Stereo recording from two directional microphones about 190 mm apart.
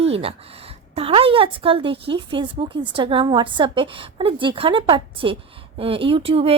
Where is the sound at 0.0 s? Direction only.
30° right (ahead or behind).